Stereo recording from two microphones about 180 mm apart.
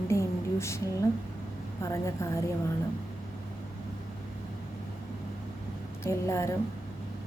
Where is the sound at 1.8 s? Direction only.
15° left (ahead or behind).